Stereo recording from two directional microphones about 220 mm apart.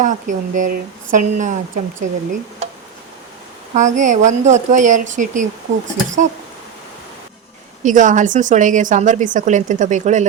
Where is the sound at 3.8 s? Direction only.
35° right (ahead or behind).